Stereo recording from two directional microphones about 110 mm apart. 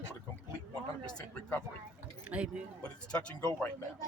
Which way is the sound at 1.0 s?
15° left (ahead or behind).